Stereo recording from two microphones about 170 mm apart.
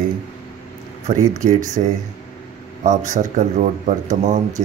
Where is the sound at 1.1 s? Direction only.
40° right (ahead or behind).